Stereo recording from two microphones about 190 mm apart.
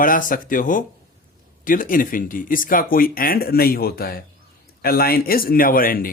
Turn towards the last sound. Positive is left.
turn(degrees=50)  # may be behind; listen again after turning